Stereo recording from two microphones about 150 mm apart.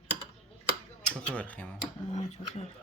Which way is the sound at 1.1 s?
10° left (ahead or behind).